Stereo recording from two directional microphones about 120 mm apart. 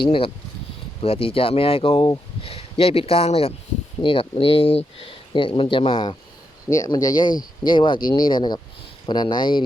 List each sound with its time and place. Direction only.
1.0 s speech: 50° left (ahead or behind)
6.7 s speech: 25° left (ahead or behind)